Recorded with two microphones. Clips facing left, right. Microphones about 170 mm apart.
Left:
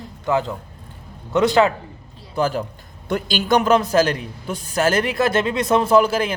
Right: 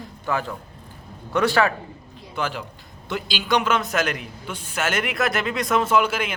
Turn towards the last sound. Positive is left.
turn(degrees=35)  # may be behind; listen again after turning